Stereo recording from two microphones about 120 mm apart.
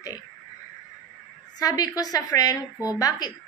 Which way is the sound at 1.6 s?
30° left (ahead or behind).